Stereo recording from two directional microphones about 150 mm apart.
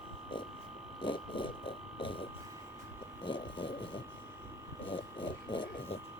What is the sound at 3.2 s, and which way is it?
Vehicle, 35° left (ahead or behind).